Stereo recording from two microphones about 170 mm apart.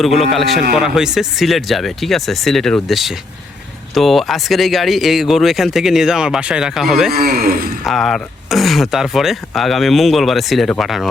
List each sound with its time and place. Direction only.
0.0 s speech: centre (ahead or behind)
7.1 s speech: 65° right (ahead or behind)
7.9 s speech: centre (ahead or behind)